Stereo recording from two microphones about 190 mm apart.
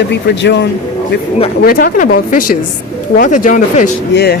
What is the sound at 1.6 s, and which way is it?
Speech, 50° left (ahead or behind).